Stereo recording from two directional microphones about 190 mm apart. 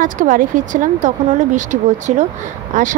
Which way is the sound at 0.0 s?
45° right (ahead or behind).